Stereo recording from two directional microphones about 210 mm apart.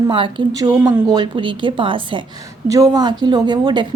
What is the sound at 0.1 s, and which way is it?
A woman's voice, 25° right (ahead or behind).